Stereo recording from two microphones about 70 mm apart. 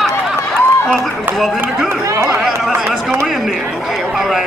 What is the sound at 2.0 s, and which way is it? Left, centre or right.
Speech, right.